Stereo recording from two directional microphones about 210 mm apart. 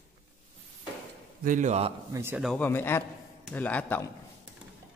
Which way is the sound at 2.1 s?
10° right (ahead or behind).